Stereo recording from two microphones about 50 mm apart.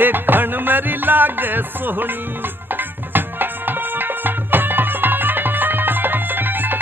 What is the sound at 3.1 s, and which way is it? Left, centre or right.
Music, right.